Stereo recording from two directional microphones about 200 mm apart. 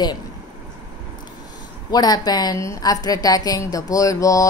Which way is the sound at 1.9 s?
20° left (ahead or behind).